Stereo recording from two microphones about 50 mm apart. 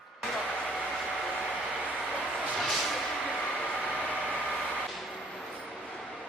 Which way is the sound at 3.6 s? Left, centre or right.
Left.